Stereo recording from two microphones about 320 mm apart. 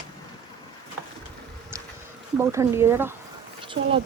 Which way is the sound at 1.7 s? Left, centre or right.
Centre.